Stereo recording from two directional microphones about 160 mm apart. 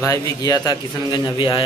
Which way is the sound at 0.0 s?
20° left (ahead or behind).